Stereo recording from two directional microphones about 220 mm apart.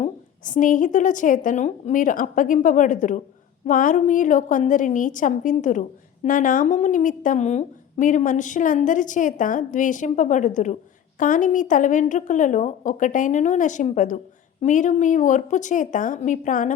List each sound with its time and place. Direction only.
0.0 s a woman's voice: 35° left (ahead or behind)